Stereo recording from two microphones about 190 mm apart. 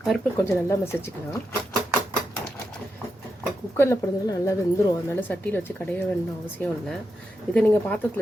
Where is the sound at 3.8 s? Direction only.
15° left (ahead or behind).